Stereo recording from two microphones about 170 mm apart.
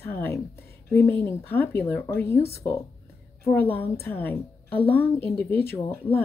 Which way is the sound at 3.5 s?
10° left (ahead or behind).